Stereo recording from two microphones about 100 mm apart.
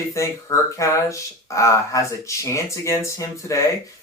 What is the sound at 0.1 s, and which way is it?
Speech, 30° left (ahead or behind).